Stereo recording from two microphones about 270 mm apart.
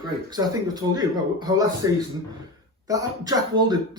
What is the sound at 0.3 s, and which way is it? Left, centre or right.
Speech, centre.